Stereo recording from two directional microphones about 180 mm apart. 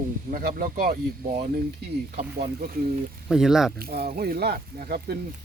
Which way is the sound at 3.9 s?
55° right (ahead or behind).